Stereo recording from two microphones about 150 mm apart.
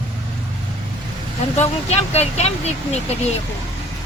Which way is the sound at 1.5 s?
45° left (ahead or behind).